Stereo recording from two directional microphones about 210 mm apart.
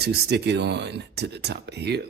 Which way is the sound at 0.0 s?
50° right (ahead or behind).